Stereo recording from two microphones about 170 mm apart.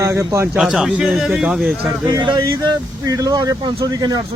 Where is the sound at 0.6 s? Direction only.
5° right (ahead or behind).